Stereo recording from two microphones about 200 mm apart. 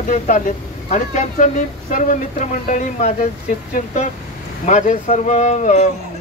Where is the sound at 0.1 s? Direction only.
40° left (ahead or behind).